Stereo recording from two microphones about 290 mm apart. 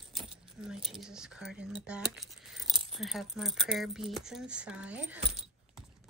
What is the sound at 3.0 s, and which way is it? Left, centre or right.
Speech, centre.